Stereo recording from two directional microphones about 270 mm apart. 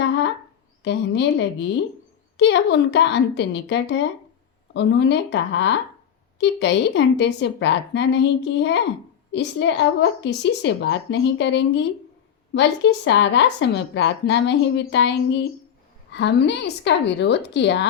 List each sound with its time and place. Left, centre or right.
0.9 s speech: left